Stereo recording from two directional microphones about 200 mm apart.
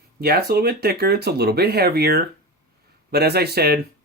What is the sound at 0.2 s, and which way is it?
Speech, 50° right (ahead or behind).